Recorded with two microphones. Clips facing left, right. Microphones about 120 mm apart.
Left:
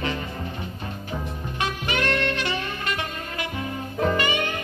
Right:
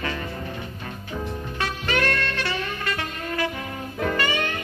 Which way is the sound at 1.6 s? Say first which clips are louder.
Right 1 dB; 20° left (ahead or behind).